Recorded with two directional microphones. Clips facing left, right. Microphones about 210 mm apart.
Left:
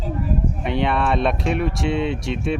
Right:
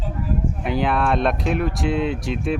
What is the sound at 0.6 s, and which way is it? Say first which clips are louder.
Speech: right 1 dB; centre (ahead or behind).